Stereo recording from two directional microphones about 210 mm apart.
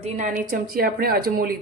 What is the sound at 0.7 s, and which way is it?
Speech, 45° right (ahead or behind).